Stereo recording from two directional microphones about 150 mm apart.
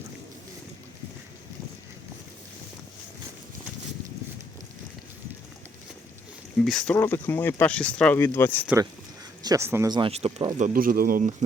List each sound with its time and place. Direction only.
6.6 s speech: 5° left (ahead or behind)
6.9 s speech: 15° left (ahead or behind)
9.4 s speech: 20° right (ahead or behind)
9.9 s speech: 40° right (ahead or behind)
10.6 s speech: 65° right (ahead or behind)